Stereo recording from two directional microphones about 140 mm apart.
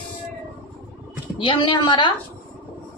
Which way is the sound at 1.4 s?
35° left (ahead or behind).